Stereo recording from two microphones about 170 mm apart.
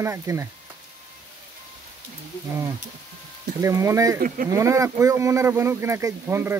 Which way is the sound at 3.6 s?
15° right (ahead or behind).